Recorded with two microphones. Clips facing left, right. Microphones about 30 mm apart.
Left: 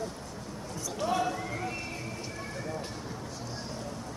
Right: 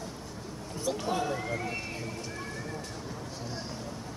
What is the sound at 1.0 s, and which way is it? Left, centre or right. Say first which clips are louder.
Speech: left 6 dB; centre.